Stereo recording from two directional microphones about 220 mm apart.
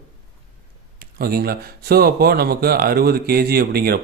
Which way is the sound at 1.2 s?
45° right (ahead or behind).